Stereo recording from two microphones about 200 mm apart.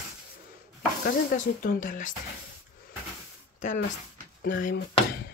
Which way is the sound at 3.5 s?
40° left (ahead or behind).